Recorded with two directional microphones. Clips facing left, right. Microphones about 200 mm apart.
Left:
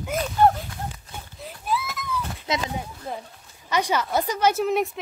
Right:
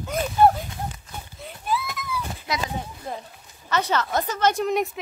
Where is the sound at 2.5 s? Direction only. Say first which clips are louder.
Left 2 dB; 20° left (ahead or behind).